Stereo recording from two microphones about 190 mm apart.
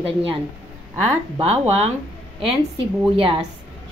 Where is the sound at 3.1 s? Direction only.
30° right (ahead or behind).